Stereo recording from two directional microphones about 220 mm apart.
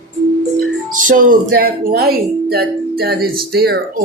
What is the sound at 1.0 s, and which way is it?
Speech, 40° right (ahead or behind).